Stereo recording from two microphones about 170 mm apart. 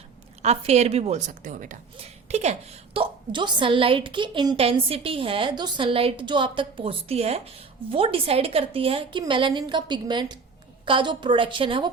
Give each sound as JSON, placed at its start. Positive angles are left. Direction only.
{"t": 0.4, "sound": "a woman's voice", "side_deg": -40}